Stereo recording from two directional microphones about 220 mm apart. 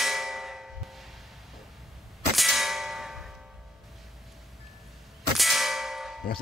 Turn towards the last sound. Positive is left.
turn(degrees=0)  # may be behind; listen again after turning